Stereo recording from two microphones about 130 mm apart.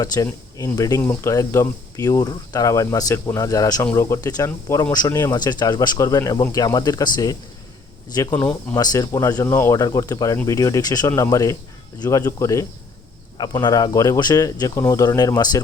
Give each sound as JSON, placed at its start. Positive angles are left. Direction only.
{"t": 0.0, "sound": "speech", "side_deg": 30}